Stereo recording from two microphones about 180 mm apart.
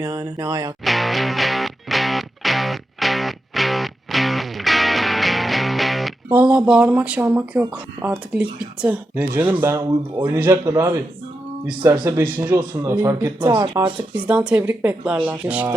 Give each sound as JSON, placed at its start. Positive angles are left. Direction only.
{"t": 0.0, "sound": "speech", "side_deg": -20}
{"t": 0.9, "sound": "music", "side_deg": 0}
{"t": 6.3, "sound": "speech", "side_deg": -5}
{"t": 14.3, "sound": "speech", "side_deg": -10}